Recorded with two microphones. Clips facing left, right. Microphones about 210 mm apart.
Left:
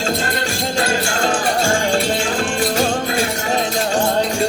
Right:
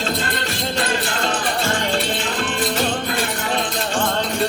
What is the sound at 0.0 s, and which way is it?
Music, 45° left (ahead or behind).